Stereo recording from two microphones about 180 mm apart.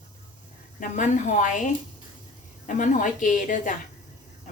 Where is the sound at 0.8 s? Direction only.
45° left (ahead or behind).